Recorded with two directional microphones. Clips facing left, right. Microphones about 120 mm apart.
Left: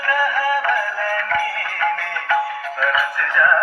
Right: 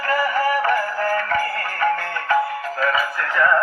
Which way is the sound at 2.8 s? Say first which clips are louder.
Left 1 dB; 35° right (ahead or behind).